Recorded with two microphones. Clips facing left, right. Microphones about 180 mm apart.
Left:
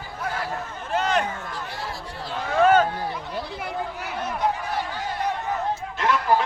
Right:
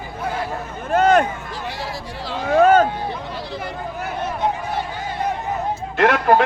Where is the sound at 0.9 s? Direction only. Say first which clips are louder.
Right 9 dB; 50° right (ahead or behind).